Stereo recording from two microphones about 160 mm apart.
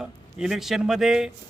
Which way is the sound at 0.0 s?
5° right (ahead or behind).